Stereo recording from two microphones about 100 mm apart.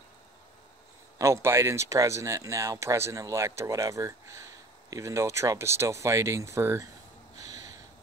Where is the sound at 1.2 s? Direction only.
25° right (ahead or behind).